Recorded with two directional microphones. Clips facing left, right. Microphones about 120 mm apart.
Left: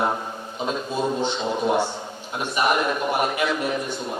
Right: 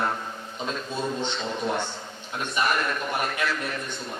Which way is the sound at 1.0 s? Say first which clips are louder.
Left 5 dB; 35° left (ahead or behind).